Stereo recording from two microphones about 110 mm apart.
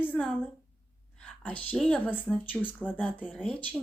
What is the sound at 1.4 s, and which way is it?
A woman's voice, 15° left (ahead or behind).